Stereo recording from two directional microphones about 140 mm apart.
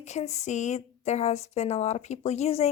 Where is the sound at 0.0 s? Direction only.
55° left (ahead or behind).